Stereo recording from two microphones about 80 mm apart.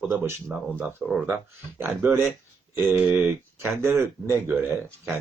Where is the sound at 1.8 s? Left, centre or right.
Right.